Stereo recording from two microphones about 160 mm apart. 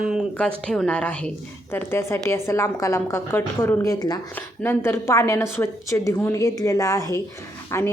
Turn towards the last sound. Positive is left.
turn(degrees=15)  # may be behind; listen again after turning